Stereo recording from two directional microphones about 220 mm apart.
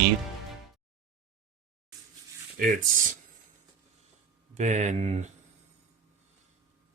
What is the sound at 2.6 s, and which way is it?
Speech, 40° right (ahead or behind).